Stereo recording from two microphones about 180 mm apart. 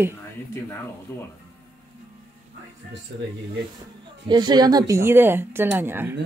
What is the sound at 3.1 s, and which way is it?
Speech, 75° right (ahead or behind).